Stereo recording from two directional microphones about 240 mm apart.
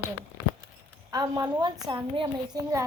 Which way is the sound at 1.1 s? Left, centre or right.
Centre.